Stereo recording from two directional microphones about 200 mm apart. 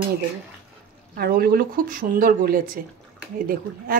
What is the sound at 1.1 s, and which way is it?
A woman's voice, 50° right (ahead or behind).